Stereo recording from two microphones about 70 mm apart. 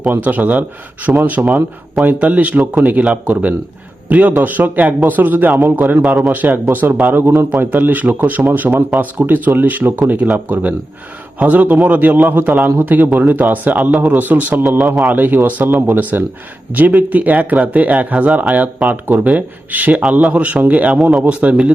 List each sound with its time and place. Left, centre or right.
0.3 s speech: right
6.1 s a man's voice: centre
6.3 s speech: right
20.0 s a man's voice: centre